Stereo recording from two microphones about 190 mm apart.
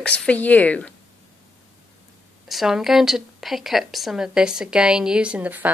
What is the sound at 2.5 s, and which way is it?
A woman's voice, centre (ahead or behind).